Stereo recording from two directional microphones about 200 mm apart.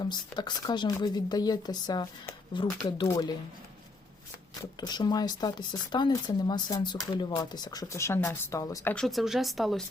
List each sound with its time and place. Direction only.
0.0 s speech: 20° left (ahead or behind)
4.8 s speech: 20° left (ahead or behind); by 9.8 s centre (ahead or behind)